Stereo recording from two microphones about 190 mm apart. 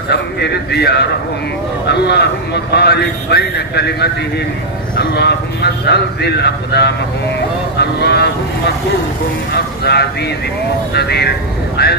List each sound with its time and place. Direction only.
0.1 s speech: 60° left (ahead or behind)